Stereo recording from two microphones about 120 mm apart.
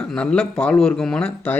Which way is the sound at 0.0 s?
5° left (ahead or behind).